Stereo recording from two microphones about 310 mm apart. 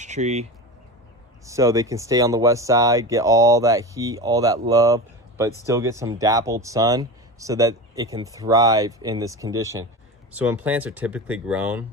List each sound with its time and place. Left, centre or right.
0.0 s speech: right
1.5 s speech: centre